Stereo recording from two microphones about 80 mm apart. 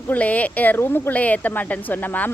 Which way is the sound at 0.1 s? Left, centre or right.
Centre.